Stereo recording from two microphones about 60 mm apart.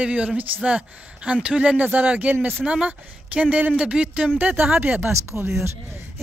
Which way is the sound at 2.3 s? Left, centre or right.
Right.